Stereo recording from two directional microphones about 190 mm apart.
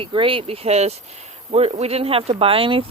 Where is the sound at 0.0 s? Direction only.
25° right (ahead or behind).